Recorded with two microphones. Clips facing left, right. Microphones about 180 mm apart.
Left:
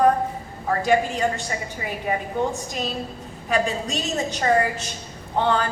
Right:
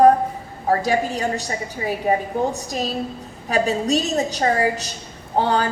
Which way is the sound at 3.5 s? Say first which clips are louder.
Right 4 dB; 40° right (ahead or behind).